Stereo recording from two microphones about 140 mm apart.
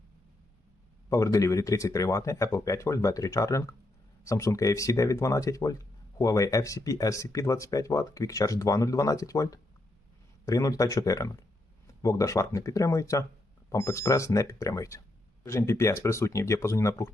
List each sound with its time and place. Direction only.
1.1 s speech: 25° left (ahead or behind)